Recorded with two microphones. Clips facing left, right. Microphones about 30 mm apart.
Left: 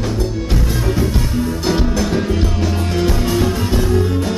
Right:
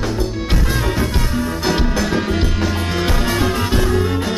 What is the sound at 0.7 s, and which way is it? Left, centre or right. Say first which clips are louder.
Music: left 2 dB; right.